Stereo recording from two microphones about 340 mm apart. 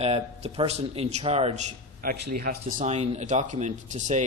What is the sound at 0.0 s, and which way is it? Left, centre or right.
Speech, centre.